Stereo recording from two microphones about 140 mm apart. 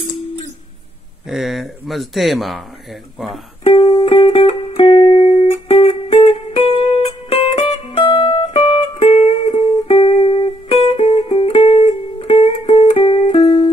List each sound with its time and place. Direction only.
1.3 s speech: centre (ahead or behind)
3.6 s music: 40° left (ahead or behind)